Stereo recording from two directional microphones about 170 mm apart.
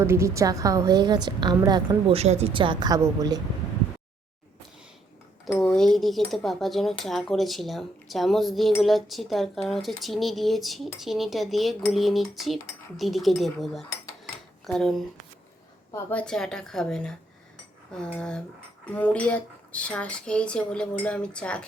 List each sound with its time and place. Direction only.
0.0 s a woman's voice: 15° right (ahead or behind)
2.1 s a woman's voice: 40° right (ahead or behind); by 3.4 s 20° right (ahead or behind)
5.5 s speech: 5° left (ahead or behind)